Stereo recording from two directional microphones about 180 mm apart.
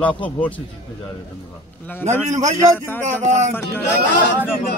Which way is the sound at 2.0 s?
40° right (ahead or behind).